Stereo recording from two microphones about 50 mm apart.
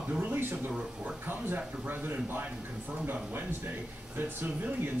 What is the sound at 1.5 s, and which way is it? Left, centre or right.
Speech, right.